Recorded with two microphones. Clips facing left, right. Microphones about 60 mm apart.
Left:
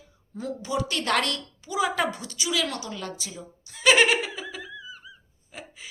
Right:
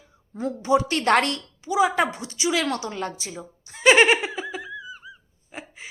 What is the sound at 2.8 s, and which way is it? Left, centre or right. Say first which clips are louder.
Giggle: right 5 dB; right.